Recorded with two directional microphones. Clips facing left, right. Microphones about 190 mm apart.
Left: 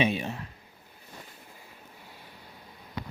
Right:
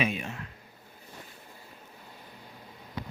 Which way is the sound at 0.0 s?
30° left (ahead or behind).